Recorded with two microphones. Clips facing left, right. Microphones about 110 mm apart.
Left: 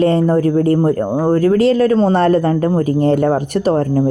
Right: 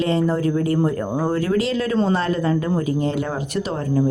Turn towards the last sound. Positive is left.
turn(degrees=50)  # may be behind; listen again after turning